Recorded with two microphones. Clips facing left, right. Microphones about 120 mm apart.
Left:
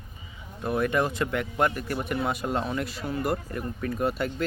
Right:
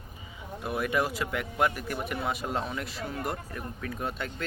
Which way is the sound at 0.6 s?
5° right (ahead or behind).